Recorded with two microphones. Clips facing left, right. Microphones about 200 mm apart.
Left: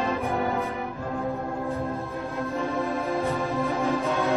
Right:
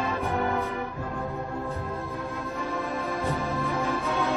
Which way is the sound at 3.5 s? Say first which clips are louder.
Left 3 dB; 15° left (ahead or behind).